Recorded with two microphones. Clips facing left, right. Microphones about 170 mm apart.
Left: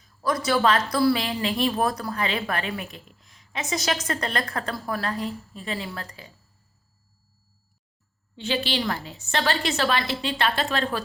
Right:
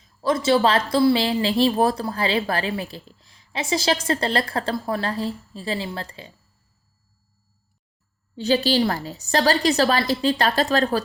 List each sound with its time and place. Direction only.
0.0 s speech: 25° right (ahead or behind)
8.4 s a woman's voice: 40° right (ahead or behind)